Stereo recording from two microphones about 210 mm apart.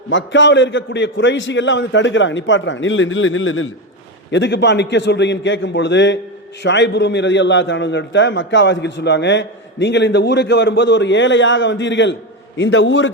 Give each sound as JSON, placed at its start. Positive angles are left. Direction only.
{"t": 0.1, "sound": "a man's voice", "side_deg": 60}
{"t": 4.3, "sound": "a man's voice", "side_deg": 55}